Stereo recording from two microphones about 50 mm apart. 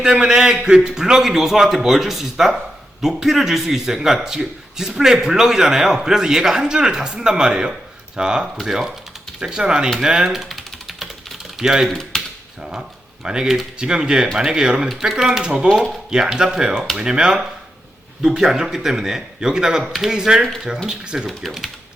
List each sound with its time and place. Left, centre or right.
0.0 s speech: centre
7.7 s a sound: centre
8.6 s speech: centre
10.0 s typing: centre
11.9 s speech: centre
13.2 s speech: centre
21.2 s speech: centre